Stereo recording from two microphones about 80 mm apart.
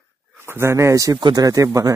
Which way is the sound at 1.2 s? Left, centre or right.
Right.